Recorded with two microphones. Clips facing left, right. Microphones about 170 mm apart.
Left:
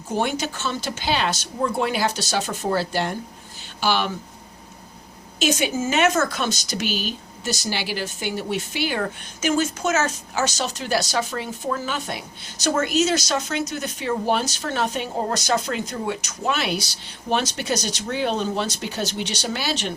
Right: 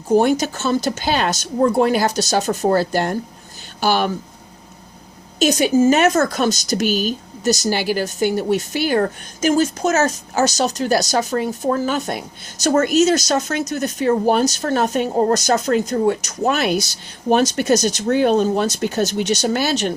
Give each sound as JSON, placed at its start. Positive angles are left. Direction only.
{"t": 0.1, "sound": "speech", "side_deg": -40}
{"t": 5.4, "sound": "speech", "side_deg": -40}